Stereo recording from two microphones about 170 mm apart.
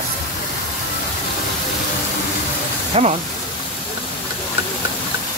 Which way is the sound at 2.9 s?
35° right (ahead or behind).